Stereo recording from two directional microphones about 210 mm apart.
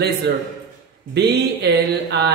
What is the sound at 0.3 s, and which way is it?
A man's voice, 55° right (ahead or behind).